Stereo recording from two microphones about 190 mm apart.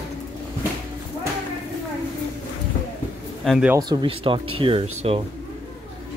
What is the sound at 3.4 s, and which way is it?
Speech, centre (ahead or behind).